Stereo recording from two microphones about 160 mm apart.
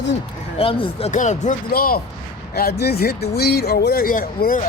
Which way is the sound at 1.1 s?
50° left (ahead or behind).